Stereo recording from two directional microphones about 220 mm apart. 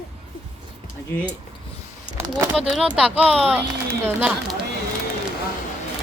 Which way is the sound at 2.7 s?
5° right (ahead or behind).